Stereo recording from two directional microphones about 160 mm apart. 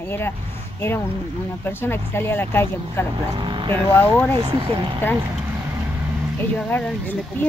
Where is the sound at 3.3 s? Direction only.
30° right (ahead or behind).